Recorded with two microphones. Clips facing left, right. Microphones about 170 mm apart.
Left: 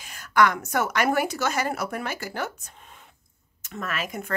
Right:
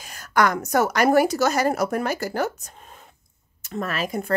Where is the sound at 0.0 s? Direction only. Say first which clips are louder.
Even; 40° right (ahead or behind).